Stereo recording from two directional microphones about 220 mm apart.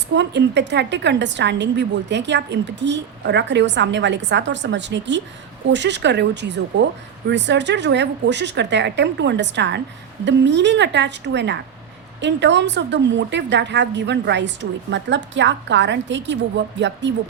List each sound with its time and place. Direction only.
0.2 s a woman's voice: 50° right (ahead or behind)